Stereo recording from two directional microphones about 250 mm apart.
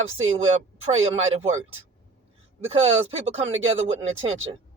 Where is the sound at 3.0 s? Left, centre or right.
Right.